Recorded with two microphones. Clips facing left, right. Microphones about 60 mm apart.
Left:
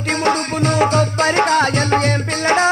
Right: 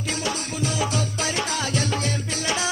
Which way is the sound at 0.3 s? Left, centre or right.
Left.